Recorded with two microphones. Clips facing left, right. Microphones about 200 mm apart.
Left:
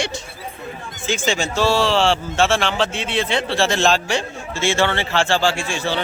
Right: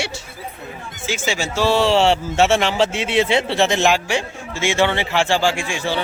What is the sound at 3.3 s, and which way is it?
A man's voice, 20° right (ahead or behind).